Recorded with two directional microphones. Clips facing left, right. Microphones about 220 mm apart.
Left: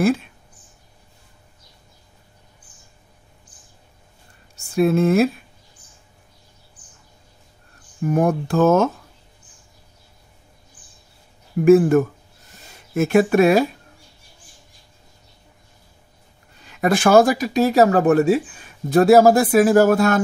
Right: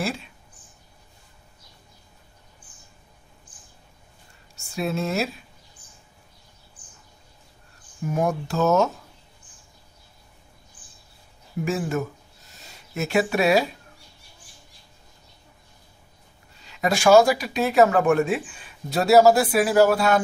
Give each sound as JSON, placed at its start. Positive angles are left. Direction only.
{"t": 0.0, "sound": "speech", "side_deg": 50}
{"t": 4.7, "sound": "speech", "side_deg": 55}
{"t": 8.0, "sound": "speech", "side_deg": 55}
{"t": 11.6, "sound": "speech", "side_deg": 55}
{"t": 16.5, "sound": "speech", "side_deg": 50}